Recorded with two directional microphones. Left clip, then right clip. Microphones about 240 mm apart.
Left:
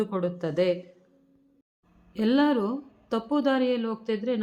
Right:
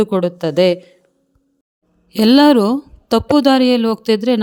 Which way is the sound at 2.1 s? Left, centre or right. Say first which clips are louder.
Right 13 dB; right.